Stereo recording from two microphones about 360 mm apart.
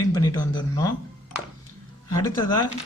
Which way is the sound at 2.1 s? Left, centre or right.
Centre.